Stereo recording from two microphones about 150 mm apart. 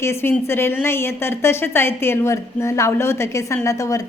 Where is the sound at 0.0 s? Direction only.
15° left (ahead or behind).